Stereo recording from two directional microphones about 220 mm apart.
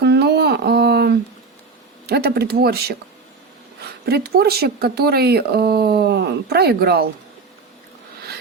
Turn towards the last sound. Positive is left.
turn(degrees=-45)  # may be behind; listen again after turning